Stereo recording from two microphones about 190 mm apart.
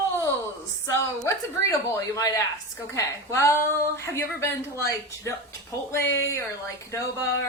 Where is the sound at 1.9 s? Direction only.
20° left (ahead or behind).